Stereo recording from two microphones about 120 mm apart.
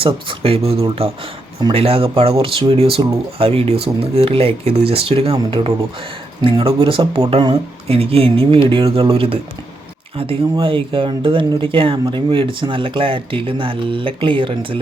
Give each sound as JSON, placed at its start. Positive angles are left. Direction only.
{"t": 0.0, "sound": "speech", "side_deg": -50}